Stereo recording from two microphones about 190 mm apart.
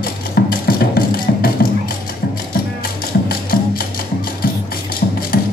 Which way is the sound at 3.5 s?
50° left (ahead or behind).